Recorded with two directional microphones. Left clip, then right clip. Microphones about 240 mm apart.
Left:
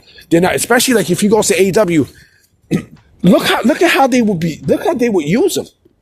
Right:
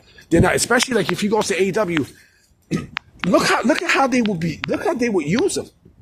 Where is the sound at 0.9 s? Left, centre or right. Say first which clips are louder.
Left 7 dB; left.